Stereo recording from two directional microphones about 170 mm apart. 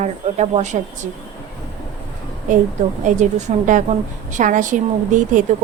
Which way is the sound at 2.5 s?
50° right (ahead or behind).